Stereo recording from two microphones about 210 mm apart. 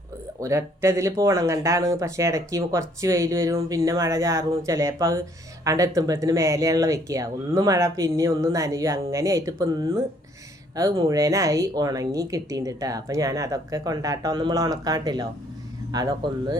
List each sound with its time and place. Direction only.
0.3 s speech: 15° right (ahead or behind)